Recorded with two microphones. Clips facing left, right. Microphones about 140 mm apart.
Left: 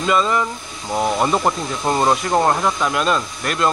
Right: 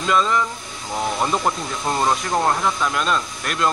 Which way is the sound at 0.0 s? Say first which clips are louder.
Left 2 dB; 5° left (ahead or behind).